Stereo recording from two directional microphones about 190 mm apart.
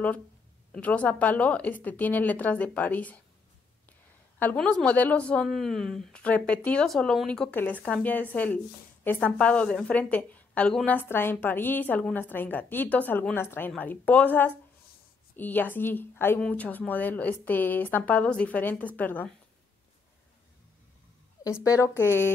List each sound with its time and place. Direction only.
0.7 s a woman's voice: 5° left (ahead or behind)
4.4 s a woman's voice: 5° left (ahead or behind)
21.6 s a woman's voice: 15° left (ahead or behind)